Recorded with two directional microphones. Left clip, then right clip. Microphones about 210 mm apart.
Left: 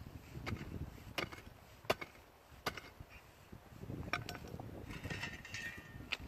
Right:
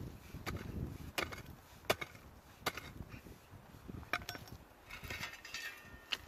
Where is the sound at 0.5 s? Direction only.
10° right (ahead or behind).